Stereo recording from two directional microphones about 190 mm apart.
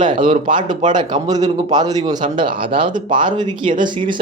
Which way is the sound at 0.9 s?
20° right (ahead or behind).